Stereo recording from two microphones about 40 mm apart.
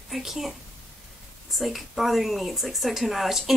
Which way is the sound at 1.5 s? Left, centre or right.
Centre.